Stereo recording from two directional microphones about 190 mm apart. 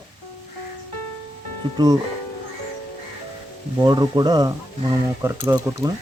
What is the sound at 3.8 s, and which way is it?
Speech, 20° right (ahead or behind).